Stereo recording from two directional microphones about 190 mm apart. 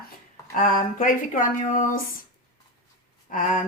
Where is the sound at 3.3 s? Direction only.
45° left (ahead or behind).